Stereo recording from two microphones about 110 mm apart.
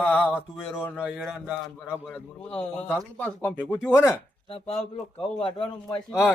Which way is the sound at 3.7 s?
25° left (ahead or behind).